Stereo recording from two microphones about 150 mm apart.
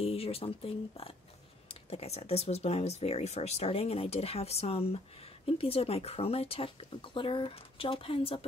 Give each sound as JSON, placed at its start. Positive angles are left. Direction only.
{"t": 0.0, "sound": "speech", "side_deg": 40}